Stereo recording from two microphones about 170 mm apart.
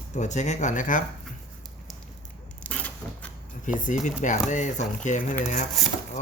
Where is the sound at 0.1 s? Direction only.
45° left (ahead or behind).